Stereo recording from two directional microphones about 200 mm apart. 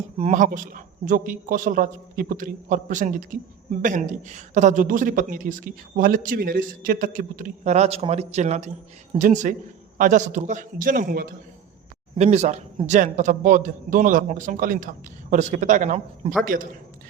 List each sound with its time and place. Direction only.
0.2 s a woman's voice: 40° right (ahead or behind)
12.1 s a woman's voice: 35° right (ahead or behind)